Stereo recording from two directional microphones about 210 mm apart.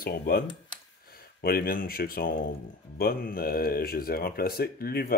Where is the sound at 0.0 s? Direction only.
45° left (ahead or behind).